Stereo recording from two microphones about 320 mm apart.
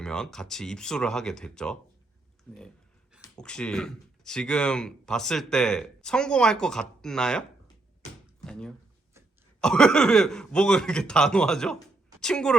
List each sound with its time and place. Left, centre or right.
0.0 s speech: centre
3.2 s speech: centre
8.4 s speech: centre